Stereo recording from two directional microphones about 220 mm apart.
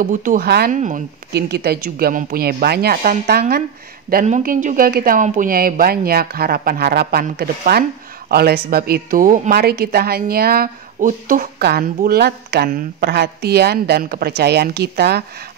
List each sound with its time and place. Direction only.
0.0 s speech: 35° right (ahead or behind)
1.3 s speech: 45° right (ahead or behind)